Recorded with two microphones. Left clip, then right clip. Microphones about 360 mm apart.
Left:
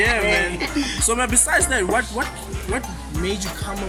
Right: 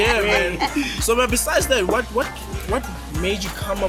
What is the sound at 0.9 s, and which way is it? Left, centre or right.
Speech, centre.